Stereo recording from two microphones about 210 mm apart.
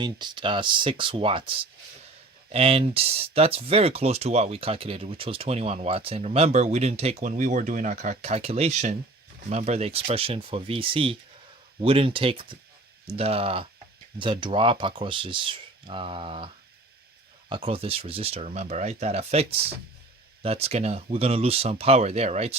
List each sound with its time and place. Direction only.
0.0 s speech: 20° right (ahead or behind)
17.5 s speech: 25° right (ahead or behind)